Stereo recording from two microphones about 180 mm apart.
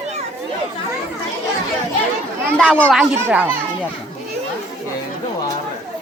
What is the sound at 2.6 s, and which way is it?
Speech, 5° left (ahead or behind).